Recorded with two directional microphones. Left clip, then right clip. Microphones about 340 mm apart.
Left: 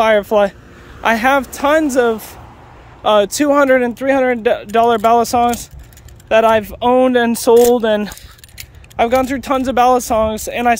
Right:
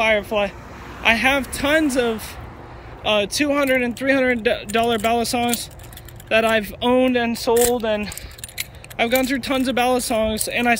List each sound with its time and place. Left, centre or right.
0.0 s speech: centre
8.9 s speech: centre